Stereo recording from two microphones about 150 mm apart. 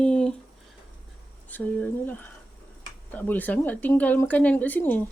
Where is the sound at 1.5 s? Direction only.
10° left (ahead or behind).